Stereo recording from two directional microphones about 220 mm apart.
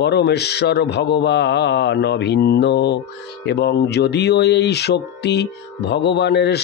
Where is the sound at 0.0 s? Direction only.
50° left (ahead or behind).